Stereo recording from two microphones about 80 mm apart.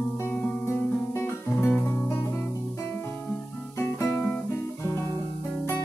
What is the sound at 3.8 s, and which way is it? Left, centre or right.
Music, left.